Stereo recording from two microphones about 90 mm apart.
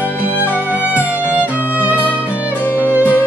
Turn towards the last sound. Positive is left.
turn(degrees=25)  # may be behind; listen again after turning